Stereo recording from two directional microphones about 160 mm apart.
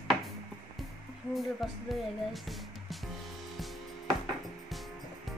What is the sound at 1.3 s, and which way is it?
Speech, centre (ahead or behind).